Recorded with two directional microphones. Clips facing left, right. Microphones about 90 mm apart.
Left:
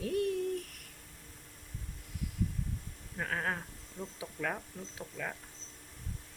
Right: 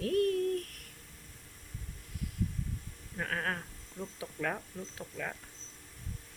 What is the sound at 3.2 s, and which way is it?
Speech, 10° left (ahead or behind).